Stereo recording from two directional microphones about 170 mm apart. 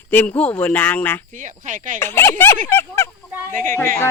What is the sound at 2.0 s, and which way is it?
Speech, 15° left (ahead or behind).